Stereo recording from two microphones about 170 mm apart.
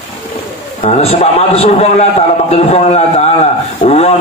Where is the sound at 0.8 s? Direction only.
35° left (ahead or behind).